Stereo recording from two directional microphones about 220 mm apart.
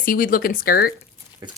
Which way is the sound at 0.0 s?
40° left (ahead or behind).